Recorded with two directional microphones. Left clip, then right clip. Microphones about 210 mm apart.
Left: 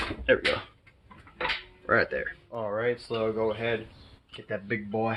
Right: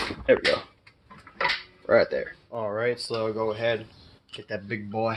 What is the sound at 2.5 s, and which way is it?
Speech, 30° right (ahead or behind).